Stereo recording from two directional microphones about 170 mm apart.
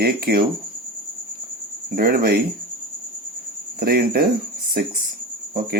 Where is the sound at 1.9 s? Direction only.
65° right (ahead or behind).